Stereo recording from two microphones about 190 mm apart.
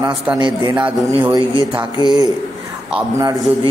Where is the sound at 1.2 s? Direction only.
20° right (ahead or behind).